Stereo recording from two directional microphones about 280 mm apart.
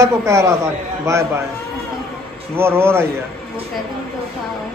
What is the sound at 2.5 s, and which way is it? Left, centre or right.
Speech, centre.